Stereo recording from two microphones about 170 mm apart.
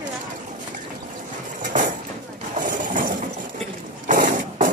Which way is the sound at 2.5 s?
50° right (ahead or behind).